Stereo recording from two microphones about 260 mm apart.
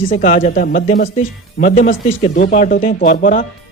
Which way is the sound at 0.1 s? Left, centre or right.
Left.